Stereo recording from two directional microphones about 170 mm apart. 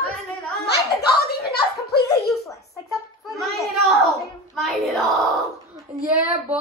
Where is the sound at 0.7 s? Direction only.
70° left (ahead or behind).